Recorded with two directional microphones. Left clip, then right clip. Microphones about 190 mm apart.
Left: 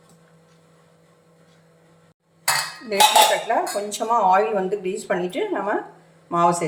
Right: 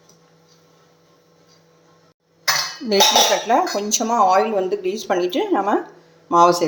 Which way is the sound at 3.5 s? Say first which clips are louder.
Right 5 dB; 40° right (ahead or behind).